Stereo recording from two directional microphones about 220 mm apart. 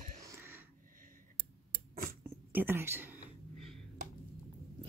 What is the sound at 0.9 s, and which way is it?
Clicking, 40° right (ahead or behind).